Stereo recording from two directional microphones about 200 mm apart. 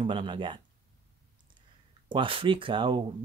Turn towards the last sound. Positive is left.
turn(degrees=-25)  # may be behind; listen again after turning